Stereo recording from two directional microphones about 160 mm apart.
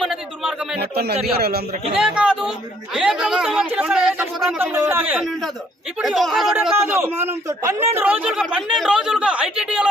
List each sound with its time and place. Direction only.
0.0 s a sound: 5° right (ahead or behind)
0.8 s speech: 90° right
1.4 s speech: 75° right (ahead or behind)
2.0 s speech: 5° right (ahead or behind)
5.2 s speech: centre (ahead or behind)
6.7 s a man's voice: 15° right (ahead or behind)
7.9 s speech: 10° right (ahead or behind)